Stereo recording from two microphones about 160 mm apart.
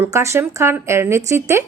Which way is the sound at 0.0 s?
20° right (ahead or behind).